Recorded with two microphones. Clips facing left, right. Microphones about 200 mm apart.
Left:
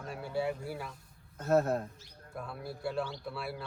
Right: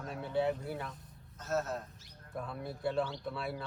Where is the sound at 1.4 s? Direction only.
55° left (ahead or behind).